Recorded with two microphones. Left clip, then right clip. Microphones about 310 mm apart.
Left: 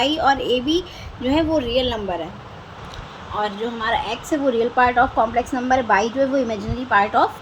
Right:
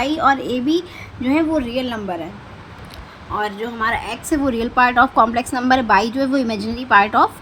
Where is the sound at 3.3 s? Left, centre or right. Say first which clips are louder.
Right 2 dB; right.